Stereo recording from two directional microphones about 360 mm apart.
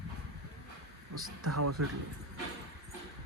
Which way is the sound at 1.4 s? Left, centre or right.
Right.